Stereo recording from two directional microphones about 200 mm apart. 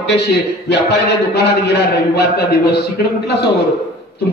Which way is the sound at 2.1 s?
55° left (ahead or behind).